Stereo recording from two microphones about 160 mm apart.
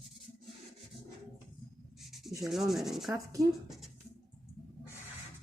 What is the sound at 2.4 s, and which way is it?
Speech, centre (ahead or behind).